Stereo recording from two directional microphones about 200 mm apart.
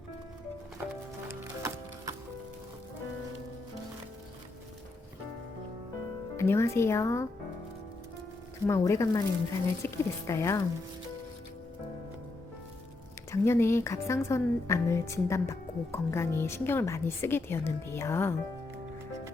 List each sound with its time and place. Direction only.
1.3 s music: 15° right (ahead or behind)
6.3 s a woman's voice: 15° left (ahead or behind)
8.6 s a woman's voice: 15° left (ahead or behind)
13.3 s a woman's voice: 10° left (ahead or behind)